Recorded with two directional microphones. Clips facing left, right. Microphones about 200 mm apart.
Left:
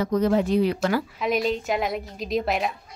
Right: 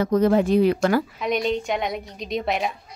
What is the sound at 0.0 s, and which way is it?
Speech, 50° right (ahead or behind).